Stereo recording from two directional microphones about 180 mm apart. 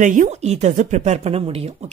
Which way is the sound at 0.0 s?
45° right (ahead or behind).